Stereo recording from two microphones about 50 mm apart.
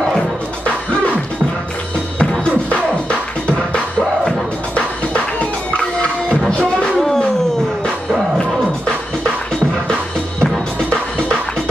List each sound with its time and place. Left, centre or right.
2.7 s music: centre
4.7 s music: left
8.4 s music: centre
10.4 s music: centre